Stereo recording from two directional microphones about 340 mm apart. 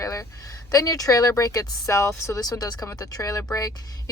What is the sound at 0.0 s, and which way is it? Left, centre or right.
Speech, centre.